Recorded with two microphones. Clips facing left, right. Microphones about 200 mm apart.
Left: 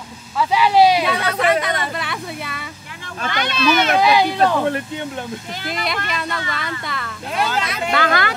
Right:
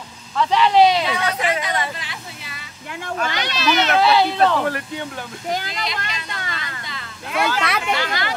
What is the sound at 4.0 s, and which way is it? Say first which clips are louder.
Speech: left 1 dB; 15° left (ahead or behind).